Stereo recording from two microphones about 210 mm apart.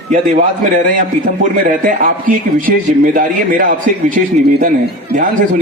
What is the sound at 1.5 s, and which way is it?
A man's voice, 40° right (ahead or behind).